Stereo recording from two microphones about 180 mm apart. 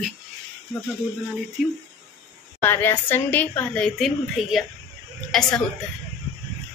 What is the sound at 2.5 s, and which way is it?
A woman's voice, 10° left (ahead or behind).